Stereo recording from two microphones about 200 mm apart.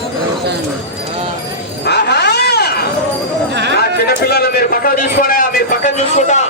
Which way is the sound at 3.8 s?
50° left (ahead or behind).